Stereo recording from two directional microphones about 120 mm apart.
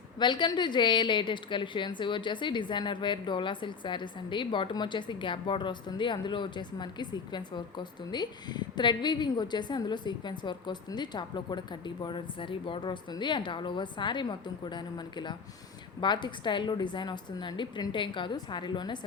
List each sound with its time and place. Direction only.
0.2 s a woman's voice: 40° left (ahead or behind)